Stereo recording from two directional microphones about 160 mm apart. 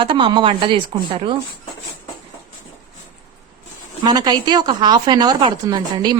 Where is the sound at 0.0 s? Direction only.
30° right (ahead or behind).